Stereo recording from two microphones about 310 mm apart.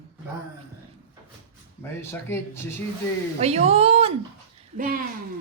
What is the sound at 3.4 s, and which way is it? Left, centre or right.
Speech, centre.